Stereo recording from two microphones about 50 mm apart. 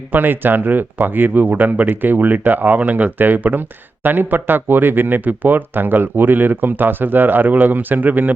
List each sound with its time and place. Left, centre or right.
0.1 s speech: right